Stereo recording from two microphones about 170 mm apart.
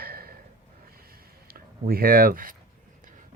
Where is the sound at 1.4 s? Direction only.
60° right (ahead or behind).